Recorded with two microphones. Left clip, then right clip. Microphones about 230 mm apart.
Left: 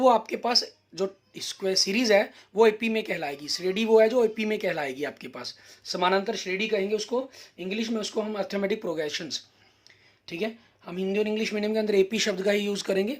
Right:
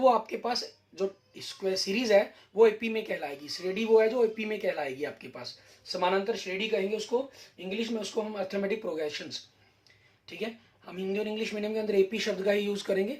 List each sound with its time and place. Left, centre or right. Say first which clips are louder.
0.3 s speech: left 6 dB; left